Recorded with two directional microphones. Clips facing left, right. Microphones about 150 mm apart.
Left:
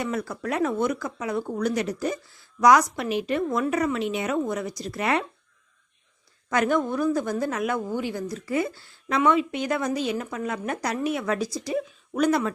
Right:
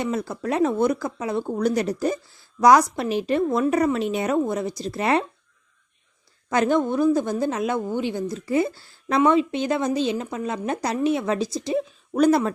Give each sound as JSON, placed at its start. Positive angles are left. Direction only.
{"t": 0.0, "sound": "a woman's voice", "side_deg": -25}
{"t": 6.5, "sound": "a woman's voice", "side_deg": -30}